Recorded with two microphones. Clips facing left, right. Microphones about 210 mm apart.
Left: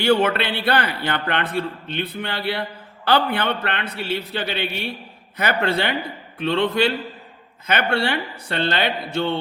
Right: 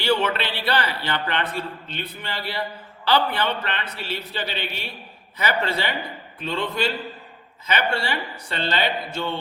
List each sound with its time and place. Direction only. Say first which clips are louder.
0.0 s a man's voice: left 4 dB; 50° left (ahead or behind)